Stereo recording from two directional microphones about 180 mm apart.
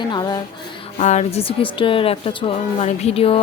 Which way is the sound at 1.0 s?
40° left (ahead or behind).